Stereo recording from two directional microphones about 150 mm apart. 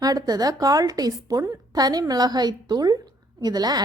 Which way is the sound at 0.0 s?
25° right (ahead or behind).